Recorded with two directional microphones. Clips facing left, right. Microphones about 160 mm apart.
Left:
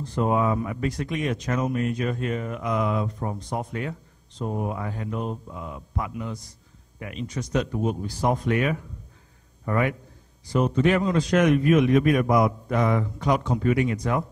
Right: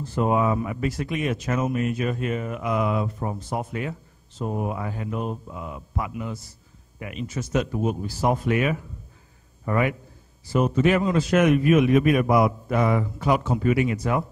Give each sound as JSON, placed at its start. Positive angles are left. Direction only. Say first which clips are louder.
{"t": 0.0, "sound": "speech", "louder": "right 1 dB", "side_deg": -10}